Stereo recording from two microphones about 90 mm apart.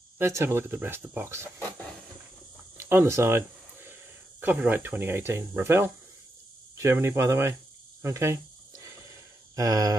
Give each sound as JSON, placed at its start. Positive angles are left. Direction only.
{"t": 0.2, "sound": "speech", "side_deg": -30}
{"t": 2.8, "sound": "a sound", "side_deg": -25}
{"t": 4.4, "sound": "speech", "side_deg": -20}
{"t": 8.0, "sound": "snake", "side_deg": -35}
{"t": 9.6, "sound": "speech", "side_deg": -40}